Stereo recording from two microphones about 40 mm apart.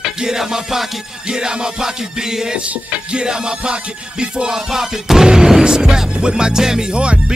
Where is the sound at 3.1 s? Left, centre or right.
Right.